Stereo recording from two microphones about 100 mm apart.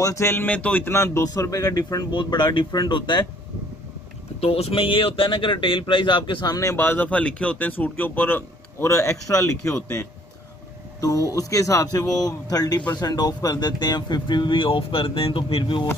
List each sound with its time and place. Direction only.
0.0 s speech: 30° left (ahead or behind); by 3.3 s 50° left (ahead or behind)
4.4 s speech: 85° left; by 15.9 s 55° left (ahead or behind)